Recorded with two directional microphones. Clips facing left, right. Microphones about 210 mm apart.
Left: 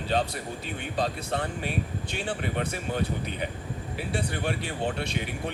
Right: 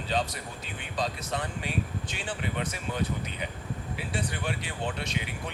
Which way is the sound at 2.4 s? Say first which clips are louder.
Left 3 dB; 45° left (ahead or behind).